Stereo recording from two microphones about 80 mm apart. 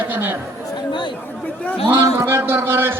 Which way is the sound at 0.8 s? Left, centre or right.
Left.